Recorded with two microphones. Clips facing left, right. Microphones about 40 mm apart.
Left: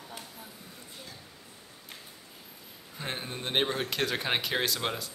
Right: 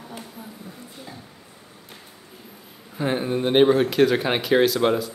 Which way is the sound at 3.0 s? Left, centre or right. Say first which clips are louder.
Right 13 dB; centre.